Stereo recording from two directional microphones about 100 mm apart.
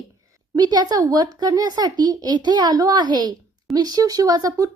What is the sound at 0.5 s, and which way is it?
A woman's voice, 45° right (ahead or behind).